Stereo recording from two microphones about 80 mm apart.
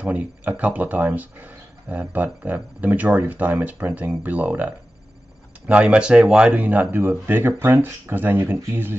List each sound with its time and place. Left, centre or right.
0.0 s speech: right